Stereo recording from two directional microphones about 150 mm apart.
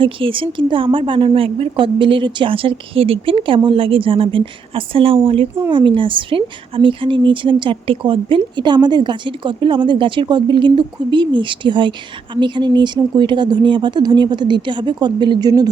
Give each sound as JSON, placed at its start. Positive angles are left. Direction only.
{"t": 0.0, "sound": "a woman's voice", "side_deg": -35}